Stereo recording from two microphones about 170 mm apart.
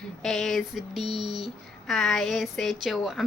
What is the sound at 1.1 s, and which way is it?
Speech, 25° right (ahead or behind).